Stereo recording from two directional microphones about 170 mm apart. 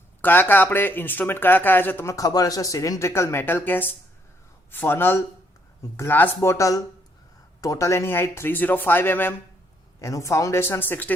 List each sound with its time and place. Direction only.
0.2 s speech: 10° left (ahead or behind)